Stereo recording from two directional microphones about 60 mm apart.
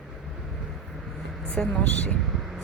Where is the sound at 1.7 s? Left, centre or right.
Left.